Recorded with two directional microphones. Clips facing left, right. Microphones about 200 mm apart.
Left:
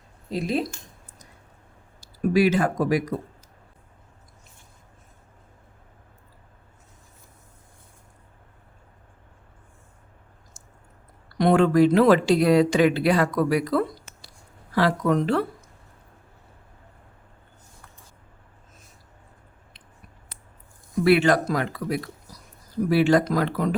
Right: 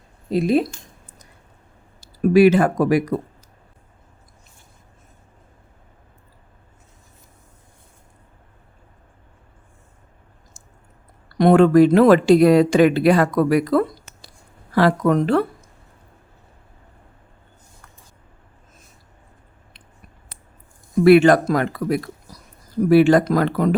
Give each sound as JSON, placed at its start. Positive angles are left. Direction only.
{"t": 0.3, "sound": "speech", "side_deg": -60}
{"t": 2.0, "sound": "speech", "side_deg": -60}
{"t": 11.3, "sound": "speech", "side_deg": -55}
{"t": 21.0, "sound": "speech", "side_deg": -50}